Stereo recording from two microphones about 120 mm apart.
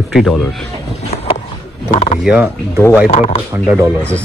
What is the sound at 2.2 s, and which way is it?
Speech, 10° right (ahead or behind).